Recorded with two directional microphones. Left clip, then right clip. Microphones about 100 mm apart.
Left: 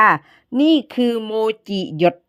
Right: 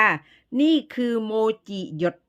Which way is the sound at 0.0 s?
30° left (ahead or behind).